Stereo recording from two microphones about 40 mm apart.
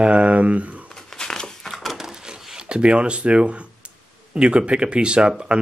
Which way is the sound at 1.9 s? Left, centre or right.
Centre.